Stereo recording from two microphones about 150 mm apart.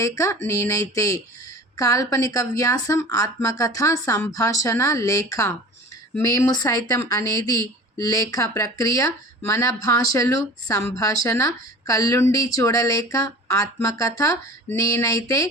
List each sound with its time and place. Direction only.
0.0 s speech: 20° left (ahead or behind)